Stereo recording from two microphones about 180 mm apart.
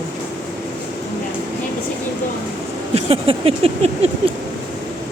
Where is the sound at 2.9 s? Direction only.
35° right (ahead or behind).